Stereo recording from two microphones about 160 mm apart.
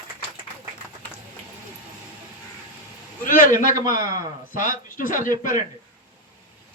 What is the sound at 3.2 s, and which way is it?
A man's voice, 55° left (ahead or behind).